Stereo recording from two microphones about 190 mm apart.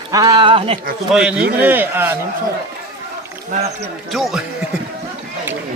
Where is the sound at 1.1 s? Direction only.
5° right (ahead or behind).